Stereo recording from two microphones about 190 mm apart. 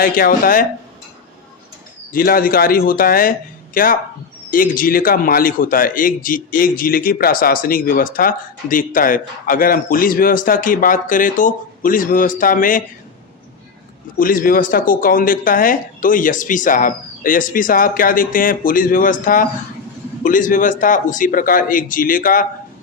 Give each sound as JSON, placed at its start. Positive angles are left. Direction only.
{"t": 0.0, "sound": "a man's voice", "side_deg": 50}
{"t": 2.1, "sound": "a man's voice", "side_deg": 50}
{"t": 14.2, "sound": "a man's voice", "side_deg": 45}